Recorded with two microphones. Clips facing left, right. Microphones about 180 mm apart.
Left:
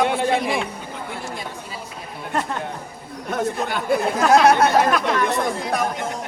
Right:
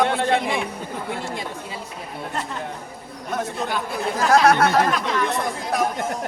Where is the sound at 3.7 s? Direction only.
55° left (ahead or behind).